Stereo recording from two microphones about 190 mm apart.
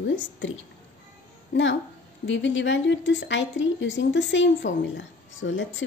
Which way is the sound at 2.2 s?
80° left.